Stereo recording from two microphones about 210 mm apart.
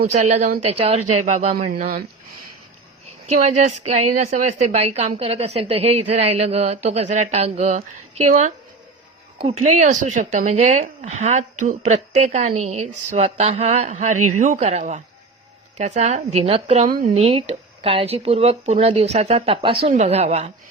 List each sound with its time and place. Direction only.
0.1 s a woman's voice: 30° right (ahead or behind)
1.7 s speech: 45° right (ahead or behind)
3.2 s a woman's voice: 35° right (ahead or behind)